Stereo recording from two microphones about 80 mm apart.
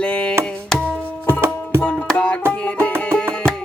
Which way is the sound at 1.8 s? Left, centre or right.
Left.